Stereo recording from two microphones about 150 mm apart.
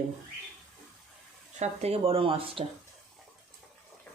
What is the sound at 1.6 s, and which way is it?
Speech, 45° right (ahead or behind).